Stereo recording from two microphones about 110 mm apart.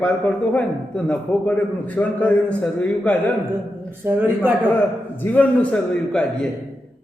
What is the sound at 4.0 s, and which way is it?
Speech, 15° right (ahead or behind).